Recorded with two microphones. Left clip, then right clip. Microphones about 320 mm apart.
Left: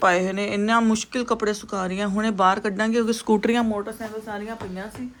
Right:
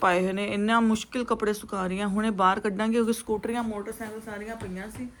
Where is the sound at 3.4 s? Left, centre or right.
Left.